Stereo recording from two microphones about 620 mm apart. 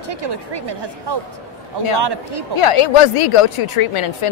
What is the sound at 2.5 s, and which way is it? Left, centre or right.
A woman's voice, left.